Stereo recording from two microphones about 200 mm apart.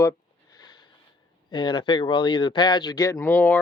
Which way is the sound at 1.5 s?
25° left (ahead or behind).